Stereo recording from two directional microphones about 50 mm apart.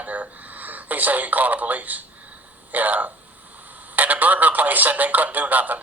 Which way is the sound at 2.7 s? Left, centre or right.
Right.